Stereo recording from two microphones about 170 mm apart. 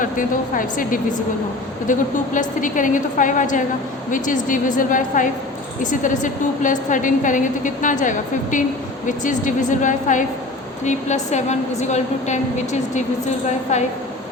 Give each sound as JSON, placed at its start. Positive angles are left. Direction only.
{"t": 0.0, "sound": "a woman's voice", "side_deg": 50}